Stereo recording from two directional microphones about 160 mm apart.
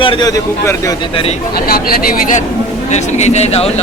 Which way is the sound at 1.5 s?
70° left (ahead or behind).